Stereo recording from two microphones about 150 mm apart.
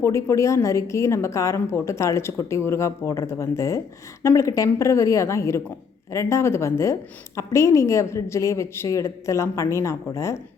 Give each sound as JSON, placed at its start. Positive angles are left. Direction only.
{"t": 0.0, "sound": "a woman's voice", "side_deg": 20}